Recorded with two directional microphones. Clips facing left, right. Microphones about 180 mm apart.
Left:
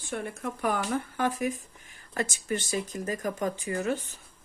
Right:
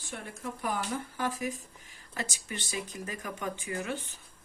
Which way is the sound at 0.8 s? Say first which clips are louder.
Left 5 dB; 55° left (ahead or behind).